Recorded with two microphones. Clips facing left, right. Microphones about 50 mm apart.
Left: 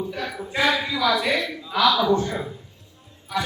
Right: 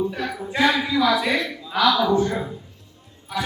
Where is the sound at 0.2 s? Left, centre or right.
Centre.